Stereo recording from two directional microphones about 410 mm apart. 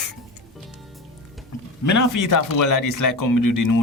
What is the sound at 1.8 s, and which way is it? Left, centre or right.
A man's voice, left.